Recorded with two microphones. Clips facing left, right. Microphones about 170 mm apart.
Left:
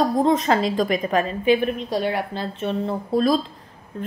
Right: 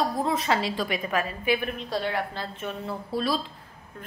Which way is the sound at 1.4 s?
15° left (ahead or behind).